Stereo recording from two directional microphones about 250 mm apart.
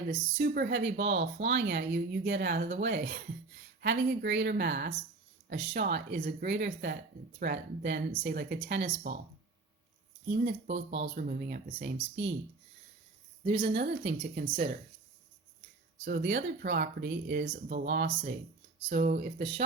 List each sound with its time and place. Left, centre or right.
0.3 s speech: right
3.8 s speech: right
10.2 s speech: right
13.4 s a woman's voice: right
13.7 s speech: right
16.0 s speech: right